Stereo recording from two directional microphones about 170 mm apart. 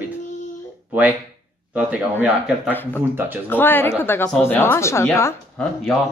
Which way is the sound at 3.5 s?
10° left (ahead or behind).